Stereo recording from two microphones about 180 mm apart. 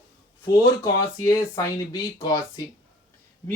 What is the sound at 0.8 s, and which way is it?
Speech, 20° left (ahead or behind).